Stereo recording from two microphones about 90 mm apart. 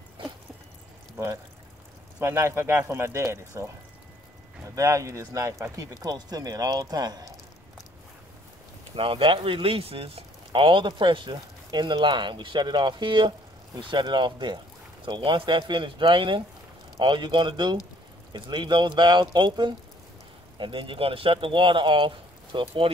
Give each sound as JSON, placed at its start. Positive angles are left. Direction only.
{"t": 2.1, "sound": "speech", "side_deg": -30}
{"t": 8.9, "sound": "speech", "side_deg": -75}
{"t": 20.5, "sound": "speech", "side_deg": -70}